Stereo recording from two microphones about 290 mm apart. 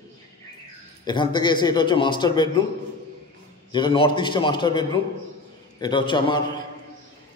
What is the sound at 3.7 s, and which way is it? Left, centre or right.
A man's voice, centre.